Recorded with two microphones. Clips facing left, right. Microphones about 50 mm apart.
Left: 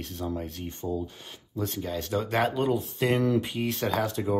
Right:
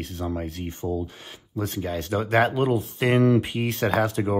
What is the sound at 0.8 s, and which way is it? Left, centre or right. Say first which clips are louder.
Speech: right 3 dB; right.